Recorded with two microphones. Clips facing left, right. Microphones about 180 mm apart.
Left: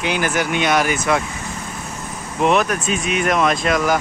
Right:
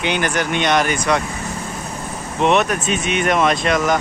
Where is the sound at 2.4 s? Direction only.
Centre (ahead or behind).